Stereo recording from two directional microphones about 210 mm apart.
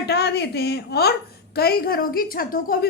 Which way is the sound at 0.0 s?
50° left (ahead or behind).